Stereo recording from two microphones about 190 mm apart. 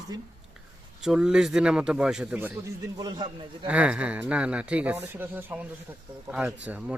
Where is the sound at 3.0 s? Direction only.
20° right (ahead or behind).